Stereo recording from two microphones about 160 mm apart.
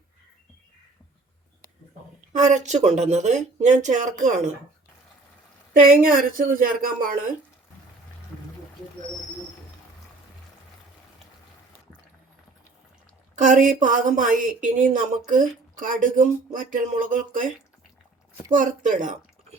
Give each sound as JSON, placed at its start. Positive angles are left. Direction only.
{"t": 2.3, "sound": "speech", "side_deg": -50}
{"t": 5.8, "sound": "speech", "side_deg": -60}
{"t": 13.3, "sound": "speech", "side_deg": -50}
{"t": 18.5, "sound": "speech", "side_deg": -55}